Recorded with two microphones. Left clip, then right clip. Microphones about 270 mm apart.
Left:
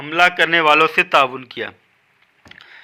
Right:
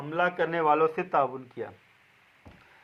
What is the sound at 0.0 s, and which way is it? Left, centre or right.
A man's voice, left.